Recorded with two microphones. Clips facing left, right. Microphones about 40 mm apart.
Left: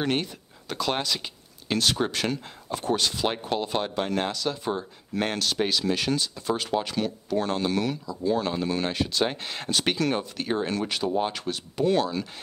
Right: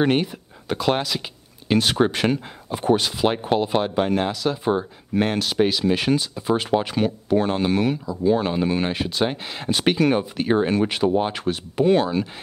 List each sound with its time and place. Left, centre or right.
0.0 s speech: centre
0.9 s speech: centre
9.7 s speech: centre